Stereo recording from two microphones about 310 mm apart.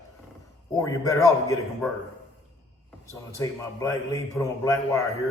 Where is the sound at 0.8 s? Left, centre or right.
Centre.